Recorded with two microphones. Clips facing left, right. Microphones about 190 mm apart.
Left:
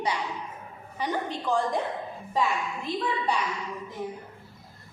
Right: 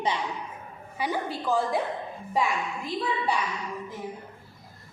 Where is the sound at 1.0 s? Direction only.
10° right (ahead or behind).